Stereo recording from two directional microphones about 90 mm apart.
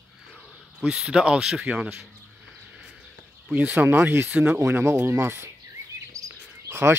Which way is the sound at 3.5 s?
15° right (ahead or behind).